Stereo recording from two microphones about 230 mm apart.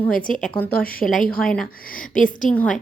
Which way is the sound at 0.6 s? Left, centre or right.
Left.